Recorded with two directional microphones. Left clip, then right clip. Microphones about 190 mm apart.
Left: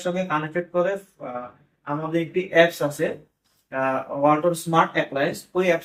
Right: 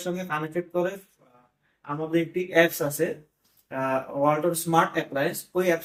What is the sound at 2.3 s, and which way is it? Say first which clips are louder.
Speech: left 4 dB; 15° right (ahead or behind).